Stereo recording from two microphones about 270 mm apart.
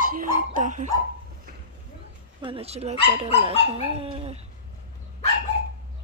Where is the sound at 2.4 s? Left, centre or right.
Right.